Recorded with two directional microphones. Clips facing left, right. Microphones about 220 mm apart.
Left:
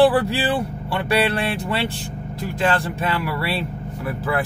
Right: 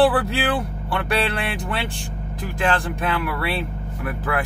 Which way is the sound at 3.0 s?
5° left (ahead or behind).